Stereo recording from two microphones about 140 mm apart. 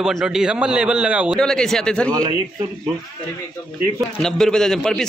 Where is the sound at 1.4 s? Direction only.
5° left (ahead or behind).